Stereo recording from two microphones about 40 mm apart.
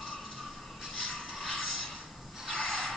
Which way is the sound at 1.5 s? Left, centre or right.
Left.